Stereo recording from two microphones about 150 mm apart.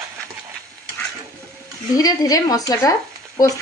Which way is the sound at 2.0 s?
25° left (ahead or behind).